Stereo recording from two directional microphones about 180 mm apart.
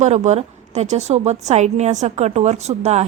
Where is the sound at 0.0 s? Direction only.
40° right (ahead or behind).